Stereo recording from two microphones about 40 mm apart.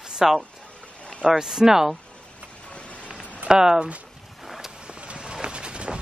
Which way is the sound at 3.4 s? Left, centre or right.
Centre.